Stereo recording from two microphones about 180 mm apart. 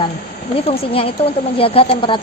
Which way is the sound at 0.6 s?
30° left (ahead or behind).